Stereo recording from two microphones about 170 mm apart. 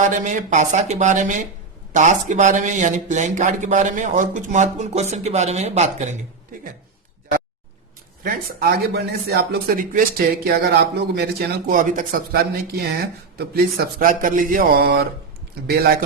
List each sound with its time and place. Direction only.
0.0 s speech: 45° right (ahead or behind)
8.2 s speech: 60° right (ahead or behind)
11.7 s speech: 50° right (ahead or behind)